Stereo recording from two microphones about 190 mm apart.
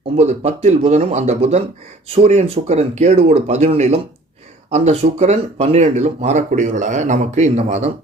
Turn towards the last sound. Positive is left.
turn(degrees=-35)  # may be behind; listen again after turning